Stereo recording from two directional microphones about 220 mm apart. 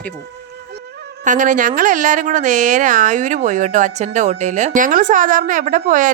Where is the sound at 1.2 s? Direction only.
35° right (ahead or behind).